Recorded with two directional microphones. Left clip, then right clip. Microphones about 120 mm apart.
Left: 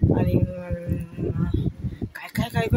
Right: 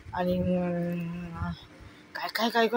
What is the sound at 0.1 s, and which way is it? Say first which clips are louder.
Speech: left 3 dB; 20° left (ahead or behind).